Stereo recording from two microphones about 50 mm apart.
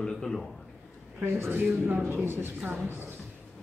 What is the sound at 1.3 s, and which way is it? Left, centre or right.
Speech, right.